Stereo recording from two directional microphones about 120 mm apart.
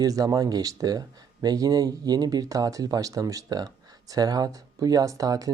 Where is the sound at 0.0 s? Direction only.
30° right (ahead or behind).